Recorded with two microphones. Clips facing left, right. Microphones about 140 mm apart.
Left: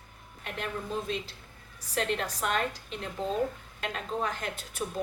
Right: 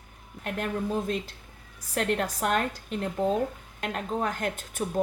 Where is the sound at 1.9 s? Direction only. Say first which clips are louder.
Right 3 dB; 50° right (ahead or behind).